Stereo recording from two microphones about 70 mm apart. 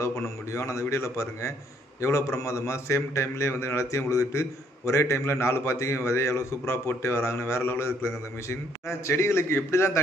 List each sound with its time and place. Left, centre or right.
0.5 s a man's voice: left